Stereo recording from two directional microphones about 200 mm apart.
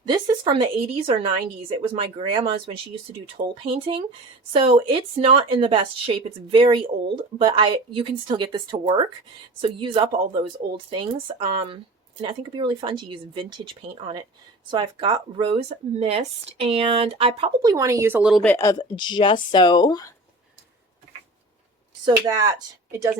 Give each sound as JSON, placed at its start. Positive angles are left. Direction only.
{"t": 0.0, "sound": "speech", "side_deg": -20}
{"t": 18.4, "sound": "speech", "side_deg": 15}
{"t": 22.0, "sound": "speech", "side_deg": -20}